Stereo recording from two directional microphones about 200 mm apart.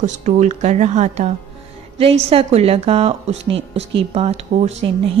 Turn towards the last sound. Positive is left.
turn(degrees=-30)  # may be behind; listen again after turning